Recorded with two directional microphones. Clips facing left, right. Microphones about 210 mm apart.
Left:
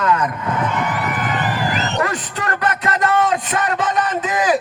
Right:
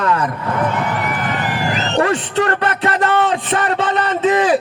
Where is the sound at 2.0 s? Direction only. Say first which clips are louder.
Right 6 dB; 30° right (ahead or behind).